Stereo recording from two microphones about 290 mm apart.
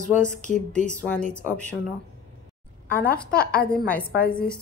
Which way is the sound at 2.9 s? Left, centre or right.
Centre.